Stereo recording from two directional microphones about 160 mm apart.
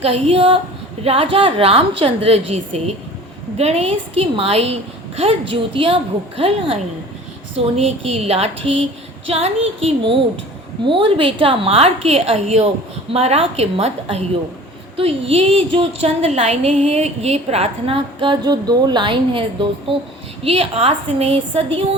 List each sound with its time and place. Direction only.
0.0 s a woman's voice: 40° right (ahead or behind)
7.8 s a woman's voice: 40° right (ahead or behind)